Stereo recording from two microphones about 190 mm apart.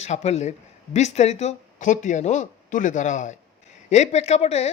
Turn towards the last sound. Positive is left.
turn(degrees=35)  # may be behind; listen again after turning